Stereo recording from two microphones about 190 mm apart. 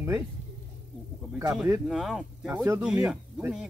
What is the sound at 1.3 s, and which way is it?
Speech, 5° right (ahead or behind).